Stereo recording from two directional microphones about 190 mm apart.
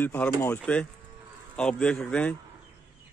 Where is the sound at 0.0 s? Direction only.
10° left (ahead or behind).